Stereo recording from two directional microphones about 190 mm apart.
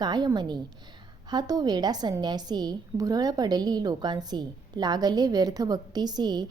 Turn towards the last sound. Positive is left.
turn(degrees=-20)  # may be behind; listen again after turning